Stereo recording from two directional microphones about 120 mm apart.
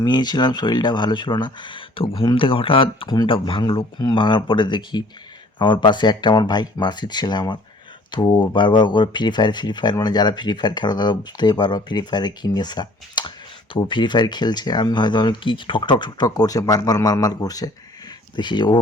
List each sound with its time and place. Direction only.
0.0 s speech: 35° left (ahead or behind)